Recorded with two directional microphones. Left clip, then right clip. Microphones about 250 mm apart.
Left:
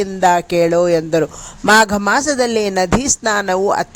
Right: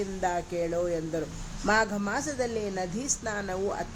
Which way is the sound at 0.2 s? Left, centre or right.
Left.